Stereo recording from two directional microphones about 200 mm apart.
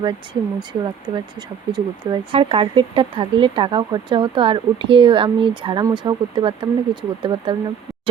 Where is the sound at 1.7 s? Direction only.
20° right (ahead or behind).